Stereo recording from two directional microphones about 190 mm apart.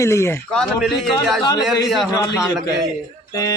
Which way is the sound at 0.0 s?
15° left (ahead or behind).